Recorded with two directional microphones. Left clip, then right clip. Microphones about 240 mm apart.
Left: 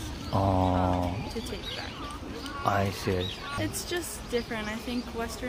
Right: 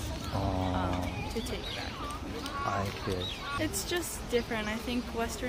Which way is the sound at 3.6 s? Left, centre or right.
Centre.